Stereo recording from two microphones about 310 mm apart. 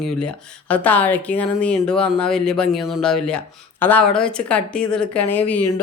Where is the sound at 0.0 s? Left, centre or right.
Centre.